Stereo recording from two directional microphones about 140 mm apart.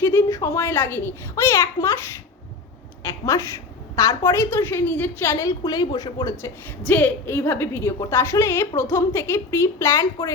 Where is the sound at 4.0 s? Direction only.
20° left (ahead or behind).